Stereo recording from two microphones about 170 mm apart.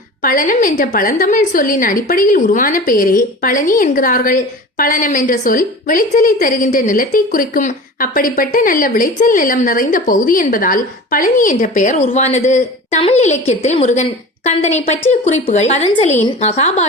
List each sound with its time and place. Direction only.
0.2 s a woman's voice: 55° left (ahead or behind); by 16.8 s 40° left (ahead or behind)